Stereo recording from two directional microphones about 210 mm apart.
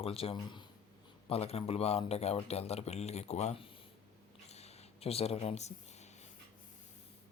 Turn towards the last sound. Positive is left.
turn(degrees=30)  # may be behind; listen again after turning